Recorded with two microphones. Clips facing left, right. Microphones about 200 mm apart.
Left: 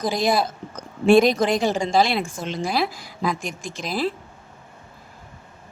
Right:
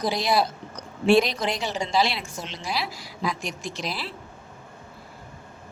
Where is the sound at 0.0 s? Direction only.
50° left (ahead or behind).